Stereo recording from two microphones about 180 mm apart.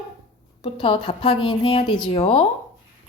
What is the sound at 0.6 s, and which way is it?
A woman's voice, 30° left (ahead or behind).